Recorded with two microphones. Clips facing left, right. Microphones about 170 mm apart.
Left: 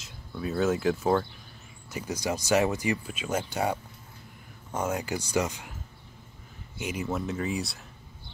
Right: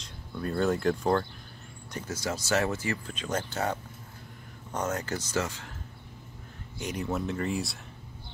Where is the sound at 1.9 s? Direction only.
15° left (ahead or behind).